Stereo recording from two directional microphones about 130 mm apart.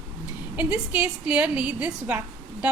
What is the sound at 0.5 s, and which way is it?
A woman's voice, 10° right (ahead or behind).